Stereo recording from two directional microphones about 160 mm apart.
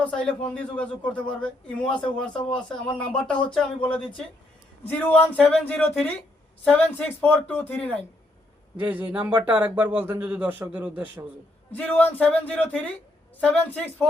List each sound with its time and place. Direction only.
0.0 s a man's voice: 10° left (ahead or behind)
3.8 s speech: 30° left (ahead or behind)
4.9 s a man's voice: 10° left (ahead or behind)
8.8 s speech: 10° right (ahead or behind)
11.7 s a man's voice: 10° left (ahead or behind)